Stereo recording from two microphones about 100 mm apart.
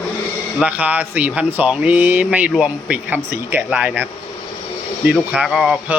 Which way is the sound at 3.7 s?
10° right (ahead or behind).